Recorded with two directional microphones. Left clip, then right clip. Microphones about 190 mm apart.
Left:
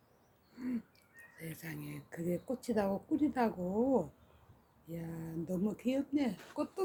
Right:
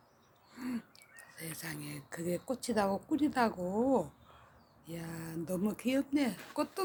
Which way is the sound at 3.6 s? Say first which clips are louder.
Right 1 dB; 5° right (ahead or behind).